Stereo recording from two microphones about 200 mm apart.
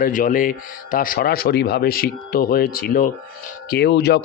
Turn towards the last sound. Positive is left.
turn(degrees=55)  # may be behind; listen again after turning